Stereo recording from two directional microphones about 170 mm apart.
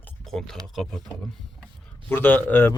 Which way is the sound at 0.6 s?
Centre (ahead or behind).